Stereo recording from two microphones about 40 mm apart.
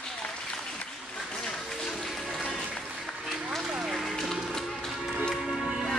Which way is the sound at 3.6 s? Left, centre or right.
Centre.